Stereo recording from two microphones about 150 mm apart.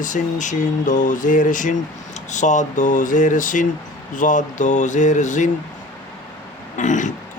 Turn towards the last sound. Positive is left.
turn(degrees=55)  # may be behind; listen again after turning